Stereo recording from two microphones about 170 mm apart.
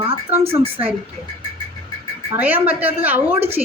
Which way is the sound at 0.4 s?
35° right (ahead or behind).